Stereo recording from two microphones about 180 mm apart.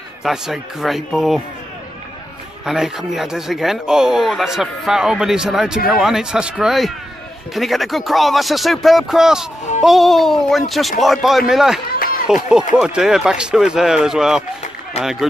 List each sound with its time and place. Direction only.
0.2 s speech: centre (ahead or behind)
2.6 s speech: 5° right (ahead or behind)
15.0 s speech: 40° left (ahead or behind)